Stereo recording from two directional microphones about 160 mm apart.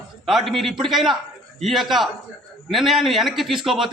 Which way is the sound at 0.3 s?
Centre (ahead or behind).